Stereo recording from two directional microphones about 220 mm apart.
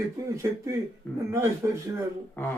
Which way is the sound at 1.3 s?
10° right (ahead or behind).